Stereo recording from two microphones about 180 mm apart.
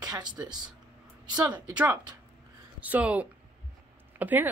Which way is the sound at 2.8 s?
10° right (ahead or behind).